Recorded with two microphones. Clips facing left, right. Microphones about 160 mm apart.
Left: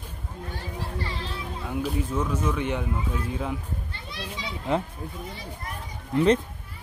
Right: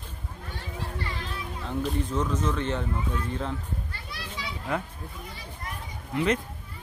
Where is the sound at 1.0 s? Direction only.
30° left (ahead or behind).